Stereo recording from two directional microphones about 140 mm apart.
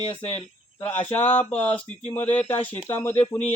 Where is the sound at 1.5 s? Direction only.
50° left (ahead or behind).